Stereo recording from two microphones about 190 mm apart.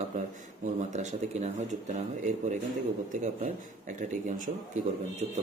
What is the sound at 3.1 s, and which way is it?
Speech, 40° right (ahead or behind).